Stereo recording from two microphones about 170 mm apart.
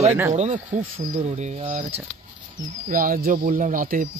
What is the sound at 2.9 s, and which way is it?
Speech, 55° right (ahead or behind).